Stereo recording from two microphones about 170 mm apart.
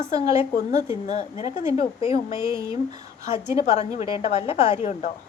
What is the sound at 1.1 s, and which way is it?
A woman's voice, 45° left (ahead or behind).